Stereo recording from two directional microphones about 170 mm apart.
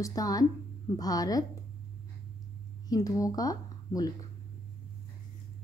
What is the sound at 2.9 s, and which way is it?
Speech, 20° left (ahead or behind).